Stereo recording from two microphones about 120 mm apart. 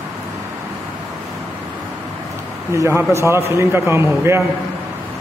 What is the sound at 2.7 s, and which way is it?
A man's voice, 20° right (ahead or behind).